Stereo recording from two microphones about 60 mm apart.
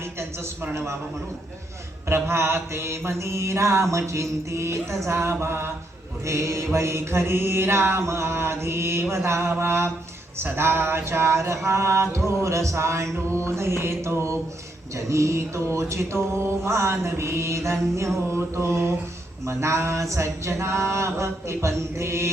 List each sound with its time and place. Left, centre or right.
0.2 s a man's voice: right
2.0 s mantra: right
3.9 s speech: right
5.0 s mantra: right
6.2 s speech: right
6.7 s mantra: right